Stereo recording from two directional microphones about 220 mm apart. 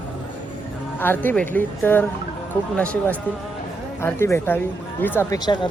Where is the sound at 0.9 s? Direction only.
10° left (ahead or behind).